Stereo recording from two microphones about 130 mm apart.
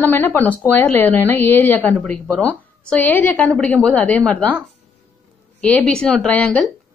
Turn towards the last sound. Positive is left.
turn(degrees=5)  # may be behind; listen again after turning